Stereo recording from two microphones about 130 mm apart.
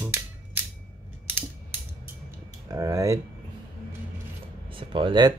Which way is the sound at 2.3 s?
25° right (ahead or behind).